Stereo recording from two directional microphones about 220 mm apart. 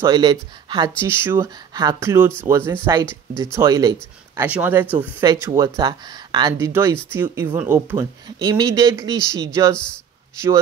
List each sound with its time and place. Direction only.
0.0 s speech: 20° right (ahead or behind)